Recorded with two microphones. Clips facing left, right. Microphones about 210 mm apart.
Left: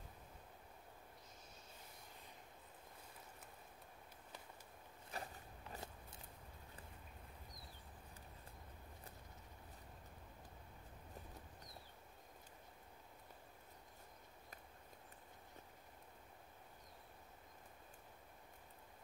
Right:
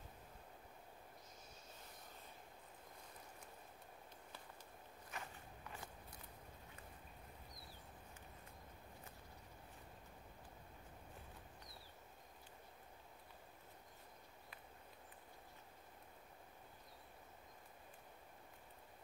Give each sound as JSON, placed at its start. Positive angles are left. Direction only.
{"t": 5.1, "sound": "biting", "side_deg": 35}